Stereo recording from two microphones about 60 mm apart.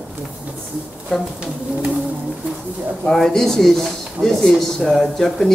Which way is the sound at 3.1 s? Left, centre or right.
Centre.